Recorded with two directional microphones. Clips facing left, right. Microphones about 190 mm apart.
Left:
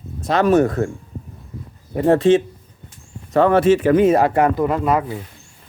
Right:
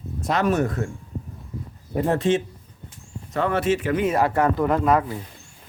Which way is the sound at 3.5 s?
35° left (ahead or behind).